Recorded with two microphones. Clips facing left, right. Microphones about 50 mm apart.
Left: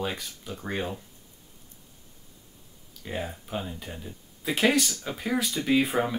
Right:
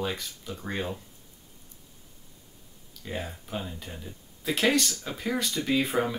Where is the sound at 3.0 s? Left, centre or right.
Centre.